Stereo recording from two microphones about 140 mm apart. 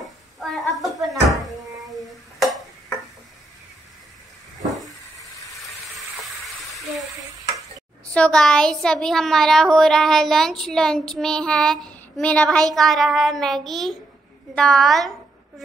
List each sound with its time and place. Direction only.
0.4 s cupboard open or close: centre (ahead or behind)
2.3 s tick-tock: centre (ahead or behind)
5.7 s a sound: centre (ahead or behind)
8.1 s speech: 5° left (ahead or behind)